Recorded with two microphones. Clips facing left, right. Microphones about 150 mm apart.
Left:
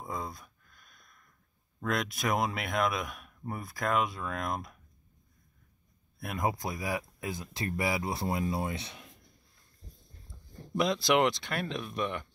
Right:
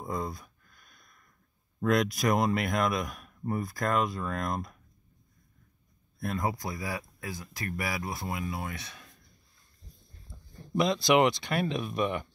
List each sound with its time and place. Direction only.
0.0 s a sound: centre (ahead or behind)
1.8 s speech: centre (ahead or behind)
6.1 s speech: 10° left (ahead or behind)
10.8 s speech: centre (ahead or behind)